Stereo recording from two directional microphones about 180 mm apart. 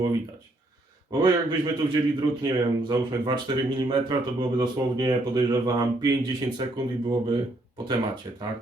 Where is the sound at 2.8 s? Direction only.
25° right (ahead or behind).